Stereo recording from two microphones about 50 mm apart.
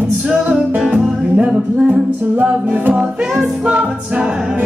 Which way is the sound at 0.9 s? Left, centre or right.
Centre.